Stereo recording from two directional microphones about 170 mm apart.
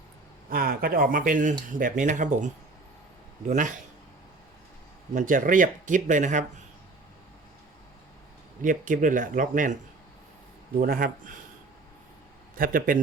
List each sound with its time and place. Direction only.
0.5 s speech: 60° right (ahead or behind)
5.1 s speech: 50° right (ahead or behind)
8.6 s speech: 50° right (ahead or behind)
10.8 s speech: 55° right (ahead or behind)
12.5 s speech: 55° right (ahead or behind)